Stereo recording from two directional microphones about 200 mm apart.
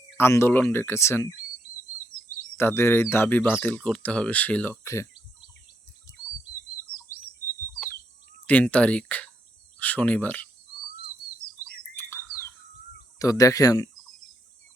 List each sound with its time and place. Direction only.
0.2 s speech: 10° left (ahead or behind)
2.6 s speech: 10° left (ahead or behind)
8.4 s speech: 5° left (ahead or behind)
11.9 s bird: 10° left (ahead or behind)
13.1 s speech: 15° left (ahead or behind)